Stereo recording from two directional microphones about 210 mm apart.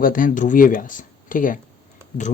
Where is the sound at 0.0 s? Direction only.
40° left (ahead or behind).